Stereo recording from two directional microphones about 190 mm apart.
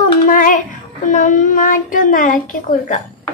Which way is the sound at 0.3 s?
45° left (ahead or behind).